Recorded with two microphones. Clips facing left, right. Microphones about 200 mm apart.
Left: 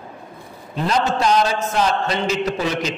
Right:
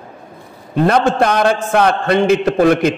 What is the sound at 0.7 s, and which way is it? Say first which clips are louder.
A man's voice: right 7 dB; 55° right (ahead or behind).